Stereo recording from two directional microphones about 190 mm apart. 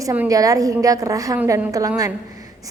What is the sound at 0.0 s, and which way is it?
A woman's voice, 15° right (ahead or behind).